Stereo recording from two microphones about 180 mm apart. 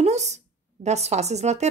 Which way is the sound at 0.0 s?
40° right (ahead or behind).